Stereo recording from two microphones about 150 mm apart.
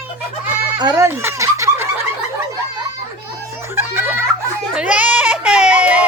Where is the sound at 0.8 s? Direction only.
30° right (ahead or behind).